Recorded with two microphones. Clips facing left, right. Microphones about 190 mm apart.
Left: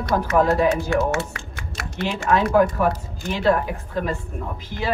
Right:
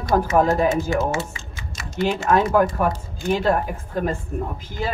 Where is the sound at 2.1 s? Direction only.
45° right (ahead or behind).